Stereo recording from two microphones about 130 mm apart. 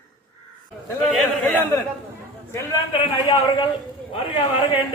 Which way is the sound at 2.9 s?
40° left (ahead or behind).